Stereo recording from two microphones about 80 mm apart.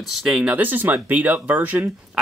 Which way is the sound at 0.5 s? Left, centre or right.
Right.